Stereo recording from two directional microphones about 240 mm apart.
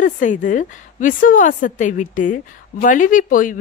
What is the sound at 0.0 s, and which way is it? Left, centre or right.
A woman's voice, left.